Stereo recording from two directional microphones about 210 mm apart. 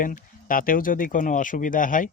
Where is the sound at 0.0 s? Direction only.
40° left (ahead or behind).